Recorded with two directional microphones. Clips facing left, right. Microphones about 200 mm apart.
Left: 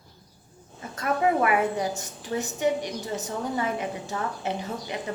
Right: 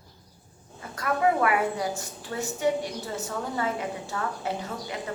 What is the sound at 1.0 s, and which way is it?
A woman's voice, 25° left (ahead or behind).